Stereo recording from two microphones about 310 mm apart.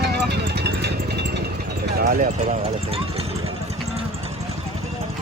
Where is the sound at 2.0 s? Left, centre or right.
Right.